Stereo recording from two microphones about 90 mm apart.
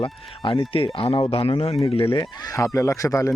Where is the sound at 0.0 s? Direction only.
70° left (ahead or behind); by 2.1 s 90° left.